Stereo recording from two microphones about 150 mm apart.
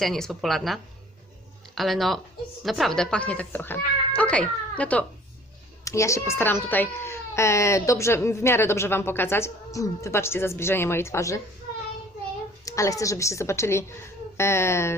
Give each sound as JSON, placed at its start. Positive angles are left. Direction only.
{"t": 0.0, "sound": "a child's voice", "side_deg": 0}
{"t": 5.8, "sound": "a child's voice", "side_deg": 20}
{"t": 12.6, "sound": "a woman's voice", "side_deg": 20}